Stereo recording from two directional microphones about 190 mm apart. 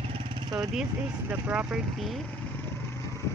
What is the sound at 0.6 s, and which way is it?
Speech, 5° right (ahead or behind).